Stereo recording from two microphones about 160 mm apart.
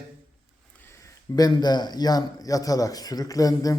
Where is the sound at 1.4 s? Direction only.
25° left (ahead or behind).